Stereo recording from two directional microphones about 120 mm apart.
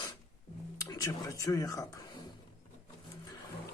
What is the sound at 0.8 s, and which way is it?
Speech, 30° left (ahead or behind).